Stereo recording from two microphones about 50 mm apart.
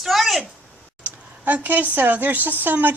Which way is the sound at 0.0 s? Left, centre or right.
Centre.